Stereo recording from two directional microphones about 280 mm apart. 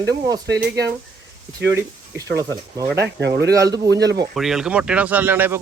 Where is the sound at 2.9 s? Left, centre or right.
Right.